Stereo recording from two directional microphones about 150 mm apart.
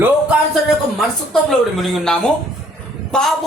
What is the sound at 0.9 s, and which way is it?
A man's voice, centre (ahead or behind).